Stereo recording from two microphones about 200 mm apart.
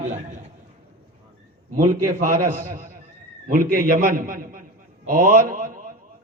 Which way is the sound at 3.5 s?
45° right (ahead or behind).